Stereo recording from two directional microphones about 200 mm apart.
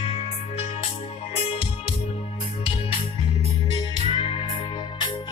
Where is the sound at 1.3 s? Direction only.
25° left (ahead or behind).